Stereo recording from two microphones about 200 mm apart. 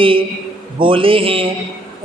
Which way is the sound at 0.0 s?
25° right (ahead or behind).